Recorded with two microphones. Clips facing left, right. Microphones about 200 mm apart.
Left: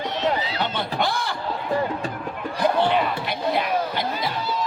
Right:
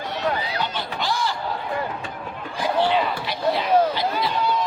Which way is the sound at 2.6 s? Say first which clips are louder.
Left 1 dB; 55° left (ahead or behind).